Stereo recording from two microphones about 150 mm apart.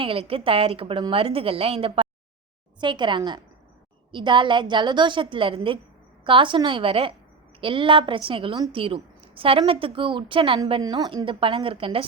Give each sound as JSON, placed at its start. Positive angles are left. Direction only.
{"t": 0.0, "sound": "a woman's voice", "side_deg": -40}